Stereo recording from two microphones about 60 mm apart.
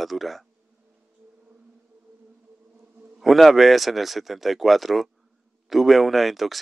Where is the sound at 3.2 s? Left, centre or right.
Centre.